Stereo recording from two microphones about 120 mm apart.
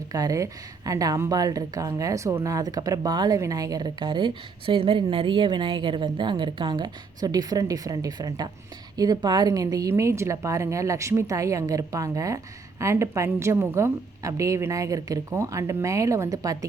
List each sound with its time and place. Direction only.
0.1 s a woman's voice: 30° right (ahead or behind)